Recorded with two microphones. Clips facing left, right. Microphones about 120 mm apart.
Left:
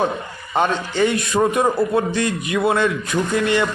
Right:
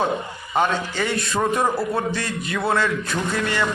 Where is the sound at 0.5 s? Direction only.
20° left (ahead or behind).